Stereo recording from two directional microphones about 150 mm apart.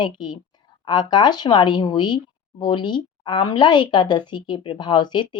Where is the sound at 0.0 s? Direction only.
30° left (ahead or behind).